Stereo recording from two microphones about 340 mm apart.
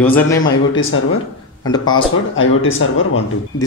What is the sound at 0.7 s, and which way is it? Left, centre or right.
Speech, left.